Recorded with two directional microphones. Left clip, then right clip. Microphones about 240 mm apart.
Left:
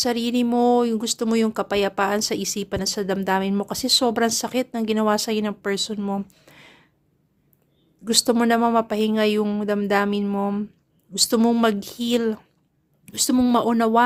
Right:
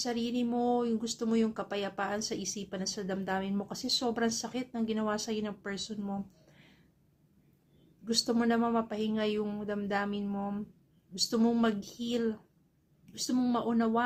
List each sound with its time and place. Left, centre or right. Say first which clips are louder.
0.0 s speech: left 11 dB; left
8.0 s speech: left 11 dB; left